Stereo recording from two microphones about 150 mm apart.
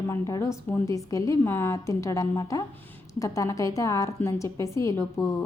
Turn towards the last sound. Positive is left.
turn(degrees=20)  # may be behind; listen again after turning